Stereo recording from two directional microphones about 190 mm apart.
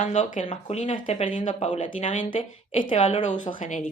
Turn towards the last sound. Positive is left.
turn(degrees=40)  # may be behind; listen again after turning